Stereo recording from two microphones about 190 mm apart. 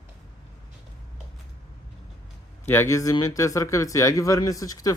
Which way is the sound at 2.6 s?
15° left (ahead or behind).